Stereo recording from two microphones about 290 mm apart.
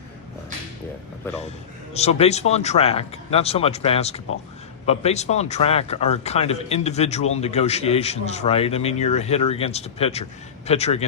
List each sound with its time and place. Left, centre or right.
1.4 s speech: left